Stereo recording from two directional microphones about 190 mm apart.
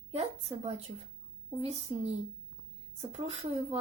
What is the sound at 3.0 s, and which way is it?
Speech, 30° right (ahead or behind).